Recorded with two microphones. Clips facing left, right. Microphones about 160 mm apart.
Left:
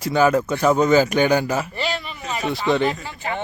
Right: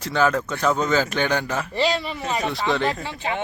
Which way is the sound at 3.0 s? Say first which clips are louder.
Right 1 dB; 15° right (ahead or behind).